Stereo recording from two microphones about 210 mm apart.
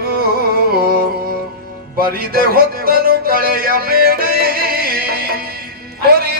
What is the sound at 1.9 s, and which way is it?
Music, 45° right (ahead or behind).